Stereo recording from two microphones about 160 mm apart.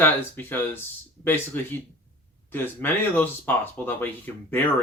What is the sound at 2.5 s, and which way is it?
Speech, 10° left (ahead or behind).